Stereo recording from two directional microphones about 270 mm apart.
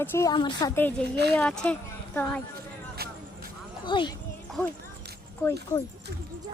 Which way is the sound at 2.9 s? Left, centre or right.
Right.